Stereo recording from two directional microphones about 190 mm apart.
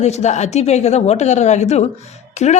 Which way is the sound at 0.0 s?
35° left (ahead or behind).